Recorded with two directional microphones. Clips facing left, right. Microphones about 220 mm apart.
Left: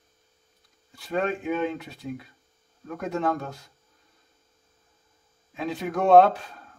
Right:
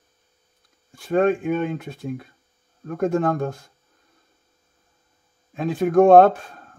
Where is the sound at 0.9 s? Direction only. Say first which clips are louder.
Right 8 dB; 50° right (ahead or behind).